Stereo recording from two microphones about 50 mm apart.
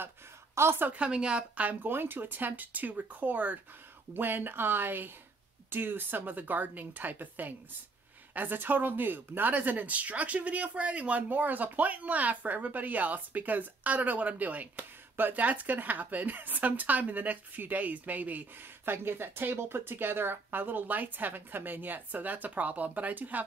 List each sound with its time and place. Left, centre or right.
0.6 s a woman's voice: right
0.8 s a woman's voice: right
1.6 s speech: right
18.9 s speech: right